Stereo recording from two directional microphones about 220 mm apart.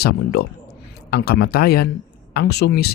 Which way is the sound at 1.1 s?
45° left (ahead or behind).